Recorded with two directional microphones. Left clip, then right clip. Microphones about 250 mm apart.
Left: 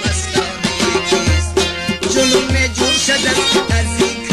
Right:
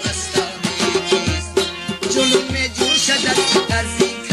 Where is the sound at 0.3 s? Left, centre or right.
Centre.